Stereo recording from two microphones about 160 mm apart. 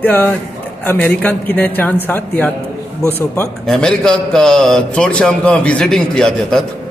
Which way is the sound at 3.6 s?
5° left (ahead or behind).